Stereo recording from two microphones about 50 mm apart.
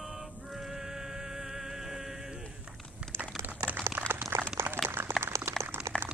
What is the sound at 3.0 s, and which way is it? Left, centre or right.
Crumpling, right.